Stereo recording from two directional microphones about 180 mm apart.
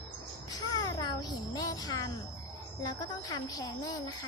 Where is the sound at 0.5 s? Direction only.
20° left (ahead or behind).